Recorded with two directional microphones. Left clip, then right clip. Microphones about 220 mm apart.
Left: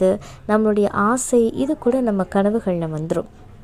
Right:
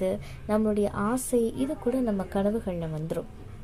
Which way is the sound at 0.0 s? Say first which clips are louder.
Left 11 dB; 30° left (ahead or behind).